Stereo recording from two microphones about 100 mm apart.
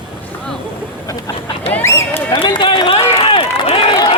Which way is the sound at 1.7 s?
25° left (ahead or behind).